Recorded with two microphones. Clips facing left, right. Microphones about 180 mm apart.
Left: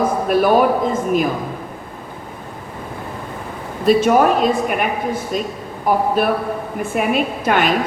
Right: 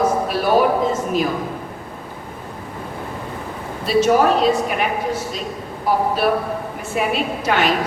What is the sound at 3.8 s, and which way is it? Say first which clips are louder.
A woman's voice: left 2 dB; 50° left (ahead or behind).